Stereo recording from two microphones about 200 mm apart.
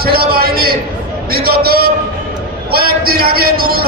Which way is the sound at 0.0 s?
50° right (ahead or behind).